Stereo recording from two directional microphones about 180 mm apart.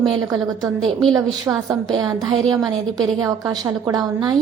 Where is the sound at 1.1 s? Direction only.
20° right (ahead or behind).